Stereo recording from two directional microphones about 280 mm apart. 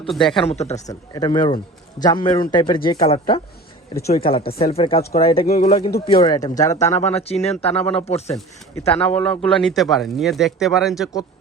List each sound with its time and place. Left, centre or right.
0.1 s speech: centre
0.4 s speech: left
0.9 s a man's voice: centre
5.5 s speech: left
6.2 s a man's voice: centre
6.7 s speech: left
9.0 s speech: centre